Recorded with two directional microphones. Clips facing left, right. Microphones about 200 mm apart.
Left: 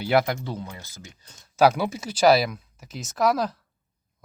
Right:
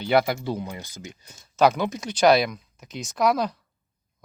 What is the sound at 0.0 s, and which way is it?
Speech, centre (ahead or behind).